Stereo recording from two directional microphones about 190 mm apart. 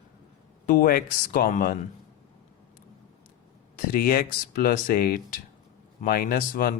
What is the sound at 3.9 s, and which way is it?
Speech, 50° left (ahead or behind).